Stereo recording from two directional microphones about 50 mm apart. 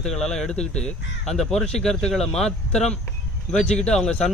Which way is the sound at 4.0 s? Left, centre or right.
Left.